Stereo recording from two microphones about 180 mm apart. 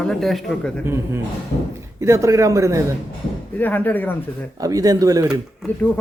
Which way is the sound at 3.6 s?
10° left (ahead or behind).